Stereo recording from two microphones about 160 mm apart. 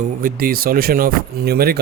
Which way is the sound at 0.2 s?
60° right (ahead or behind).